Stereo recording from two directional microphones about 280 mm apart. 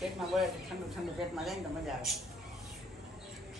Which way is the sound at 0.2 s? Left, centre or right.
Centre.